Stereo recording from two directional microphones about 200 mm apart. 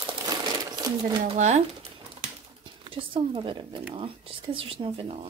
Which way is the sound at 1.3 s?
35° right (ahead or behind).